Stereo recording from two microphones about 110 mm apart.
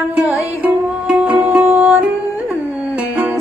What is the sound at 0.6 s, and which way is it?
Music, 15° right (ahead or behind).